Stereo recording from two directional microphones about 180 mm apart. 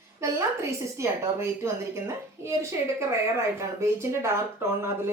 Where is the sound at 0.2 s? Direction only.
15° right (ahead or behind).